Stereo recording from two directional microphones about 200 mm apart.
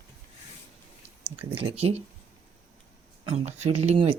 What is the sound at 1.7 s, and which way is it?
Speech, 30° right (ahead or behind).